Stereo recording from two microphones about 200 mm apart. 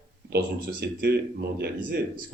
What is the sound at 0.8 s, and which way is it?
Speech, 55° right (ahead or behind).